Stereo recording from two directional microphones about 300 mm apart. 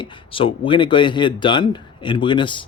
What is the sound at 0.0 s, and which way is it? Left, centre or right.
Speech, centre.